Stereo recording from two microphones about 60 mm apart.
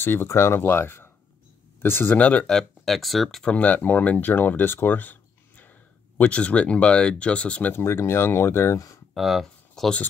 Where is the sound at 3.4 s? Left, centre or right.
Left.